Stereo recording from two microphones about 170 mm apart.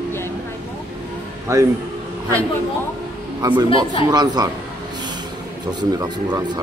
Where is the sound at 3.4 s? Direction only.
25° right (ahead or behind).